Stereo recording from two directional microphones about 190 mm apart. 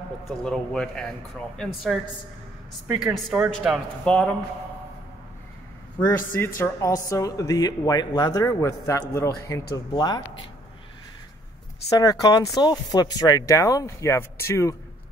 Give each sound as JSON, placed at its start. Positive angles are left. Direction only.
{"t": 0.4, "sound": "speech", "side_deg": 5}
{"t": 6.0, "sound": "speech", "side_deg": 10}
{"t": 11.9, "sound": "speech", "side_deg": 20}